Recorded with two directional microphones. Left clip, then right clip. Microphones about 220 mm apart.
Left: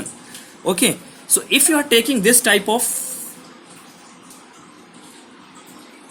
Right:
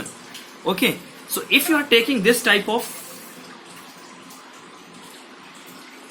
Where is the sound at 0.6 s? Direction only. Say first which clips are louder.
Left 2 dB; 40° left (ahead or behind).